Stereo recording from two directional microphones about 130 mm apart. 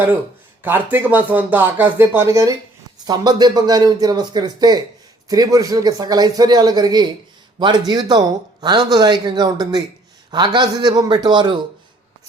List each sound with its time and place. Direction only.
0.6 s speech: 15° right (ahead or behind); by 11.5 s 35° right (ahead or behind)